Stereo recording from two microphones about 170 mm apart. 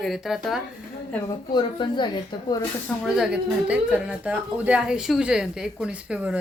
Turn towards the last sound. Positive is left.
turn(degrees=-5)  # may be behind; listen again after turning